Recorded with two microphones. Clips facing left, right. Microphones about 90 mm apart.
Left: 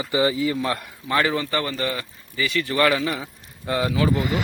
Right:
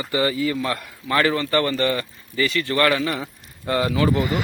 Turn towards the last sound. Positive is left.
turn(degrees=5)  # may be behind; listen again after turning